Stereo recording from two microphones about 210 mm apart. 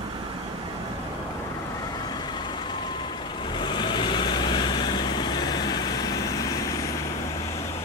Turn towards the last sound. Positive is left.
turn(degrees=15)  # may be behind; listen again after turning